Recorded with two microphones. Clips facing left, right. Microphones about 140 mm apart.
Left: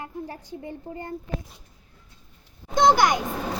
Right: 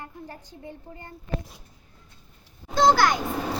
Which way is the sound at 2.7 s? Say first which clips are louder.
Left 1 dB; 20° left (ahead or behind).